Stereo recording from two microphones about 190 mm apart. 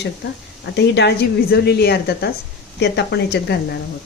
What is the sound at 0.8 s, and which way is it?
A woman's voice, 65° left (ahead or behind).